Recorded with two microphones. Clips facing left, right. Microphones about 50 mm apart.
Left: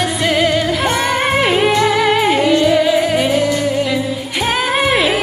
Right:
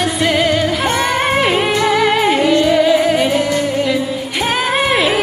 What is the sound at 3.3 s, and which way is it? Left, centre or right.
Music, right.